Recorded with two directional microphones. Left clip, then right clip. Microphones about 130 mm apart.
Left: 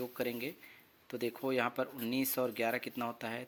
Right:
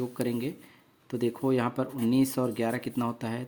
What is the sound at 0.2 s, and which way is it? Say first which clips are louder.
Speech: right 6 dB; 30° left (ahead or behind).